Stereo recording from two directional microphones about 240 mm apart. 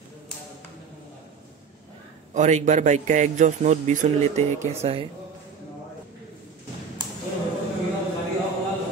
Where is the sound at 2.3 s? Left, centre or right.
Right.